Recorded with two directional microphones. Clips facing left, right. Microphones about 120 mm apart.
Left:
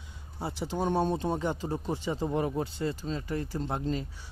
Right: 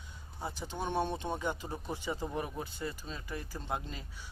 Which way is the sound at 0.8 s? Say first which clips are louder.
Left 6 dB; 40° left (ahead or behind).